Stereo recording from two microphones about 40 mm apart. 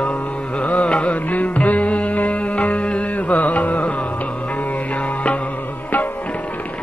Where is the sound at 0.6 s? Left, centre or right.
Left.